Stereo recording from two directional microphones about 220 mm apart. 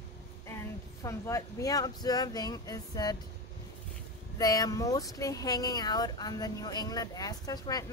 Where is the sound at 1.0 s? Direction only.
15° left (ahead or behind).